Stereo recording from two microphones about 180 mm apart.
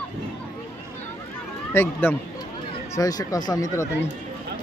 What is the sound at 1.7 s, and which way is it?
Speech, 15° left (ahead or behind).